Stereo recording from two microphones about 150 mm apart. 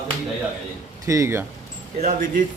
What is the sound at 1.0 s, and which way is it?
Speech, 20° right (ahead or behind).